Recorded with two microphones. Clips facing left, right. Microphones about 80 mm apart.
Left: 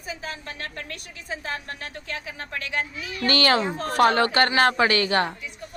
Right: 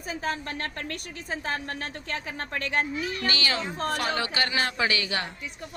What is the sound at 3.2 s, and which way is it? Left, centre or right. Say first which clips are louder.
A woman's voice: left 10 dB; left.